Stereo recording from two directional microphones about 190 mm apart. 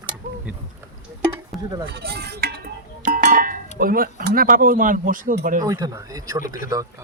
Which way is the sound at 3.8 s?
50° right (ahead or behind).